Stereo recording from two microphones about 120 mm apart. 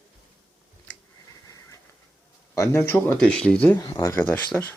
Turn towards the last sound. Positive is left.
turn(degrees=5)  # may be behind; listen again after turning